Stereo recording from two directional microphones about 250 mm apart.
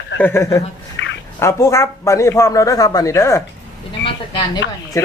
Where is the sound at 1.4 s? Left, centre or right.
Centre.